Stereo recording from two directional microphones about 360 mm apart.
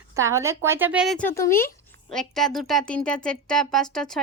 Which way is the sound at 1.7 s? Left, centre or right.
Centre.